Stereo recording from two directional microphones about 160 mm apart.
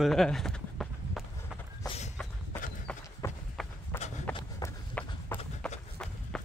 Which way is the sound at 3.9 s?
15° left (ahead or behind).